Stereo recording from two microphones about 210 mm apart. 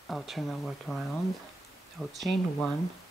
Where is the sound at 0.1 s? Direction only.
Centre (ahead or behind).